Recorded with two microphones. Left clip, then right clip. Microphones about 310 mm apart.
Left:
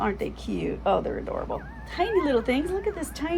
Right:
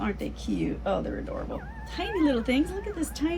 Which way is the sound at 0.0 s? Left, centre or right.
Centre.